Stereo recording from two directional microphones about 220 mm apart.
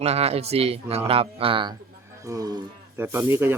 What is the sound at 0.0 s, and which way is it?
Speech, 30° right (ahead or behind).